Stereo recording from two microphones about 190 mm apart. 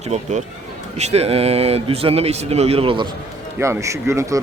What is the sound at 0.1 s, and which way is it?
Speech, 40° right (ahead or behind).